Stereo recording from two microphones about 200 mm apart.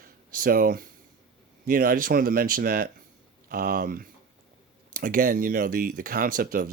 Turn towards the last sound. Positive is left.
turn(degrees=-45)  # may be behind; listen again after turning